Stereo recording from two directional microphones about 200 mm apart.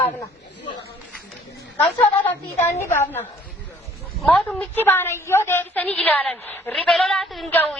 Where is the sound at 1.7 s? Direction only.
10° left (ahead or behind).